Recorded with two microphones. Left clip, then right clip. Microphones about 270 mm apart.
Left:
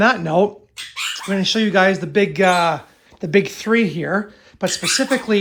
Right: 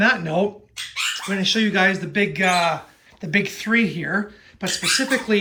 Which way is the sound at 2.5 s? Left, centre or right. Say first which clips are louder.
Left 1 dB; left.